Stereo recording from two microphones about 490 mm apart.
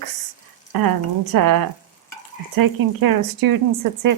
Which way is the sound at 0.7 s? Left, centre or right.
Right.